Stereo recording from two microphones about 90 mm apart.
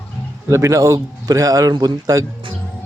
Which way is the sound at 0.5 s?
35° right (ahead or behind).